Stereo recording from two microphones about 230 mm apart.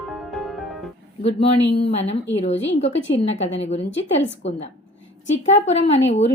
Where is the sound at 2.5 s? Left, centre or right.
Left.